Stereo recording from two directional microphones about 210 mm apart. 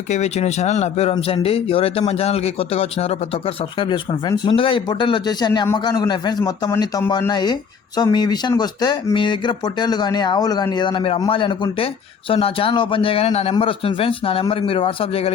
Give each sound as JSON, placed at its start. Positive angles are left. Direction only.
{"t": 0.1, "sound": "speech", "side_deg": 30}